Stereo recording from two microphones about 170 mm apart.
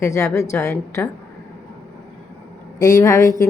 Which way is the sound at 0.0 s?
15° left (ahead or behind).